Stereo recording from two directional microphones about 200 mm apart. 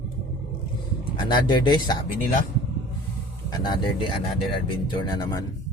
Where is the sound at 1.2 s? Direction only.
20° left (ahead or behind).